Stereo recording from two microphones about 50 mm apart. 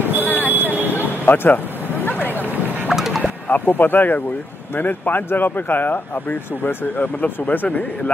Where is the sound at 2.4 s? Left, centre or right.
Right.